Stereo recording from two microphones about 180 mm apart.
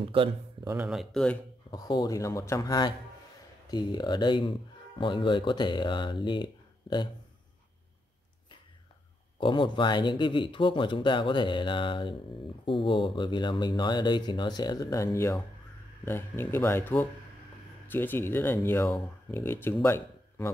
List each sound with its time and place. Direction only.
0.0 s speech: 30° right (ahead or behind)
0.8 s speech: centre (ahead or behind)
1.7 s speech: 25° left (ahead or behind)
9.4 s speech: 25° left (ahead or behind)